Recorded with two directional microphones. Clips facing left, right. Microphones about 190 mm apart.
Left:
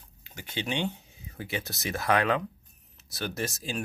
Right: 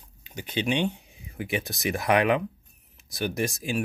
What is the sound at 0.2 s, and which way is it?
Speech, 20° right (ahead or behind).